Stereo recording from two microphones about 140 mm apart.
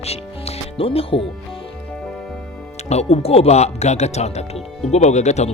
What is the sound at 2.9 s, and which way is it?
Speech, 50° left (ahead or behind).